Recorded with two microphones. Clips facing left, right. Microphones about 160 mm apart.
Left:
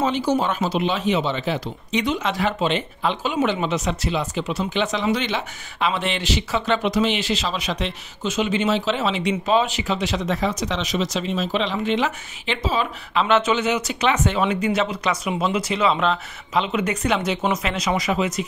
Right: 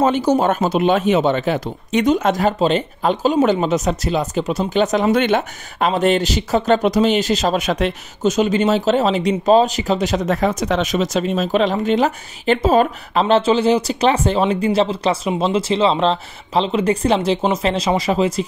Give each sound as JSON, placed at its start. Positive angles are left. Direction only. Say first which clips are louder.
{"t": 0.0, "sound": "speech", "louder": "right 5 dB", "side_deg": -45}